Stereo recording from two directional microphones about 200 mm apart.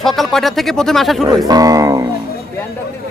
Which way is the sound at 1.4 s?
20° right (ahead or behind).